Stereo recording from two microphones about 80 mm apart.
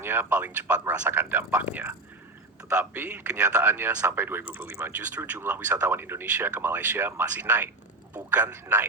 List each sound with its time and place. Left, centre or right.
0.0 s speech: right